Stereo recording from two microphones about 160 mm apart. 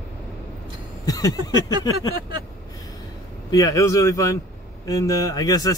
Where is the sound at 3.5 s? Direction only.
20° left (ahead or behind).